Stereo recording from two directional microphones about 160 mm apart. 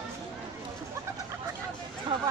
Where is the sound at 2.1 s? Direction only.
30° right (ahead or behind).